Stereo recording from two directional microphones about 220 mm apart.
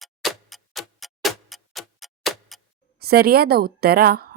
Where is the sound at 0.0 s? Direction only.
Centre (ahead or behind).